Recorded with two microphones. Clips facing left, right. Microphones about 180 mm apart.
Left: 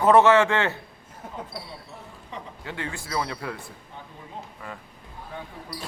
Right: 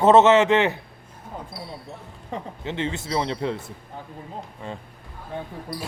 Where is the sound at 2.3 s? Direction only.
50° right (ahead or behind).